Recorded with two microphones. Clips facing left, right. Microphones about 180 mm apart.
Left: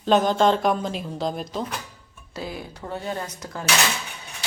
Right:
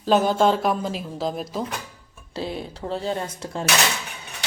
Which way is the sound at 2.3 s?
30° right (ahead or behind).